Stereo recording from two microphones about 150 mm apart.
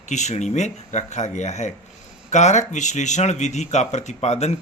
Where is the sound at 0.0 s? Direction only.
50° left (ahead or behind).